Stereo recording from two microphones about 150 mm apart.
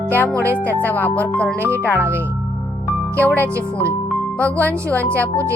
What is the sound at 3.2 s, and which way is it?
Speech, 10° left (ahead or behind).